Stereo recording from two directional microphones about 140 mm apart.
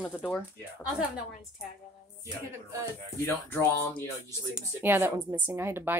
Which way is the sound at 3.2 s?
15° left (ahead or behind).